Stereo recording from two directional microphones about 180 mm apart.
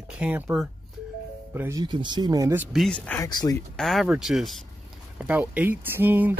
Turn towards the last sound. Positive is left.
turn(degrees=-10)  # may be behind; listen again after turning